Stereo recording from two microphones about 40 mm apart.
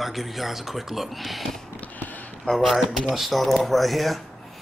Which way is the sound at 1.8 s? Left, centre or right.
Left.